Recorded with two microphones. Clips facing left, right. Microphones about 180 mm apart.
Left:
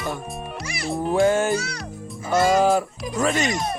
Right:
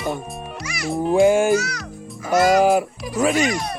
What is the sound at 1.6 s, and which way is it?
Speech, 30° left (ahead or behind).